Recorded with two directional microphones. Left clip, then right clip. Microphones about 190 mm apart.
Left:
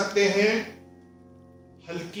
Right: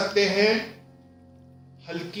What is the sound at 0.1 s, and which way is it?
Speech, centre (ahead or behind).